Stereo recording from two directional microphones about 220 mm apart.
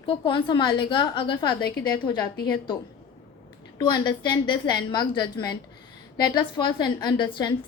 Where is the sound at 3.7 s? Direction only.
20° left (ahead or behind).